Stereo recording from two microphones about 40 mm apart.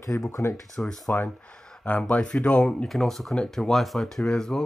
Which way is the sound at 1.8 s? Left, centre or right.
Left.